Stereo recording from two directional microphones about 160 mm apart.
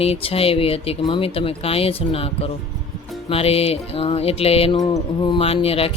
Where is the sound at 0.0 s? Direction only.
35° left (ahead or behind).